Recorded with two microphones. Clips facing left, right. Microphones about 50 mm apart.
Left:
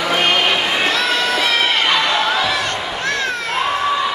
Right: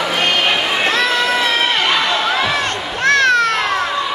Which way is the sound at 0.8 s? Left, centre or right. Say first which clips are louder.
Right 2 dB; right.